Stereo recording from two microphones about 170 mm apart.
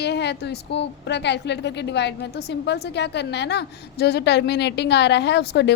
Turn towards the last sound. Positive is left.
turn(degrees=85)